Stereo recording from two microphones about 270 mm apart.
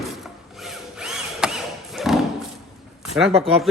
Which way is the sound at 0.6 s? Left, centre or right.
Centre.